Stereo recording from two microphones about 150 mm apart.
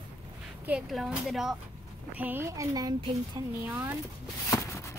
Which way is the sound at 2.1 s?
15° right (ahead or behind).